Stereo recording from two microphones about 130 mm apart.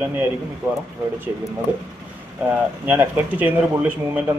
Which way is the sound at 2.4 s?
15° right (ahead or behind).